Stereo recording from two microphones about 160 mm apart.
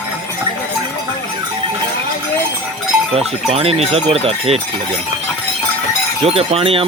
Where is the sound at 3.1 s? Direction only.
40° right (ahead or behind).